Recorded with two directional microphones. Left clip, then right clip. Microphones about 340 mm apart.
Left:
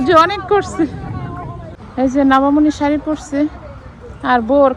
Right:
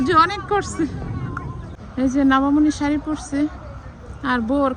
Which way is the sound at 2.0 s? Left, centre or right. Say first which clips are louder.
Left 5 dB; centre.